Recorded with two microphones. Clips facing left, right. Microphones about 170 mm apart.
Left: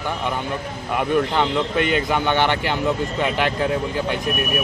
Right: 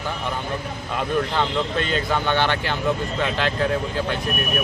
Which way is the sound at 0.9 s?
15° left (ahead or behind).